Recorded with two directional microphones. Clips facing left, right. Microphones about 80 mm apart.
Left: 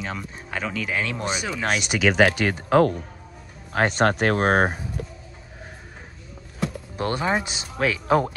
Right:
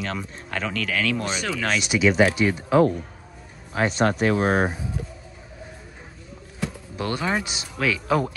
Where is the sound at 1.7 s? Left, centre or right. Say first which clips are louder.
Right 1 dB; left.